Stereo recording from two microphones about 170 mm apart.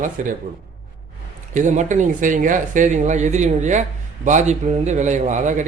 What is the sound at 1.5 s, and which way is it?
Speech, 45° right (ahead or behind).